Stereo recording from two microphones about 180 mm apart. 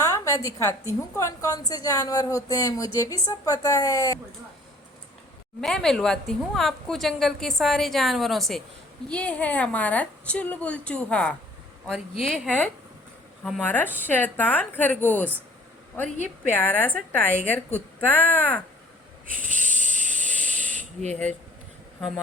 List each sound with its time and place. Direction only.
0.0 s a woman's voice: 15° left (ahead or behind)
5.5 s a woman's voice: 5° left (ahead or behind)
16.1 s a woman's voice: 45° right (ahead or behind)
16.5 s a woman's voice: 10° left (ahead or behind)
19.3 s snake: 45° right (ahead or behind)